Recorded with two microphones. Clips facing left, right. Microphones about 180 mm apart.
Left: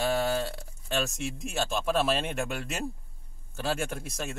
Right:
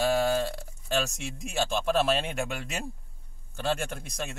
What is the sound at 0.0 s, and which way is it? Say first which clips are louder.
A man's voice: right 2 dB; centre (ahead or behind).